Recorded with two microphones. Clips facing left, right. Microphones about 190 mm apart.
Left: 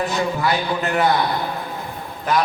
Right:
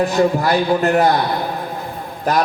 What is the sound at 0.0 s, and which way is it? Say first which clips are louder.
A man's voice: right 6 dB; 40° right (ahead or behind).